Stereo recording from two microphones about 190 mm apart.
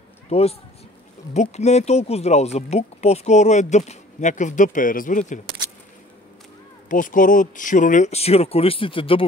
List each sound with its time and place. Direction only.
0.3 s speech: 35° left (ahead or behind)
6.9 s speech: 45° left (ahead or behind); by 9.2 s 30° left (ahead or behind)